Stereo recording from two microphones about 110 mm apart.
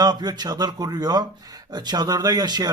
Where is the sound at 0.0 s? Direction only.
40° right (ahead or behind).